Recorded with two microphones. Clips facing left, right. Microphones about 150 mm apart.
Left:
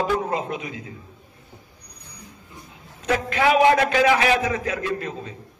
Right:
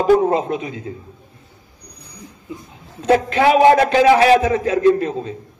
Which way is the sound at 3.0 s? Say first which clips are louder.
Right 8 dB; 30° right (ahead or behind).